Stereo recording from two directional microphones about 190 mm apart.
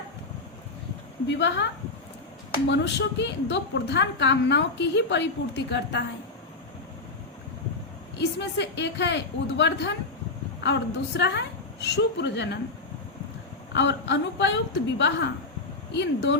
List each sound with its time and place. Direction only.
1.3 s a woman's voice: 70° left (ahead or behind)
2.6 s a woman's voice: 65° left (ahead or behind)
8.2 s a woman's voice: 65° left (ahead or behind)
13.7 s a woman's voice: 65° left (ahead or behind)